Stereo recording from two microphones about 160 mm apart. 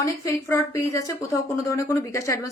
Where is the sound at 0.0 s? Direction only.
20° left (ahead or behind).